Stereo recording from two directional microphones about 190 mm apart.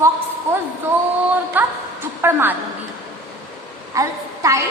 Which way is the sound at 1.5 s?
10° right (ahead or behind).